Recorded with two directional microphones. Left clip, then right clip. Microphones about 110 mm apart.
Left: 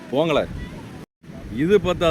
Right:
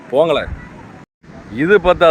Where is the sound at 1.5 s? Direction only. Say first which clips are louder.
Right 7 dB; 10° left (ahead or behind).